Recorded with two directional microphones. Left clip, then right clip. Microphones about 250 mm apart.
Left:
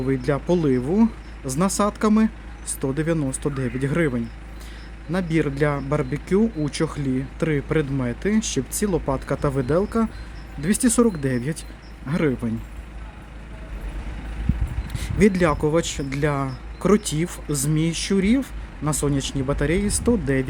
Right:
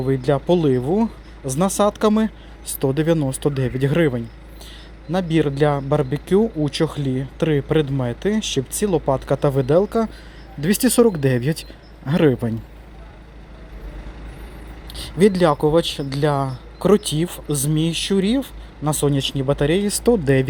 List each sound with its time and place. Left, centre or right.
0.0 s speech: centre
15.4 s speech: centre